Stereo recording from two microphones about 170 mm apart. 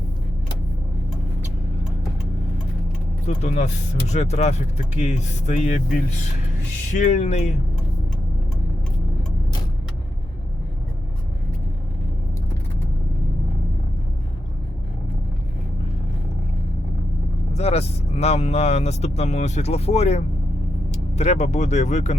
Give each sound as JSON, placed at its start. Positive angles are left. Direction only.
{"t": 3.2, "sound": "speech", "side_deg": 40}
{"t": 17.5, "sound": "speech", "side_deg": 40}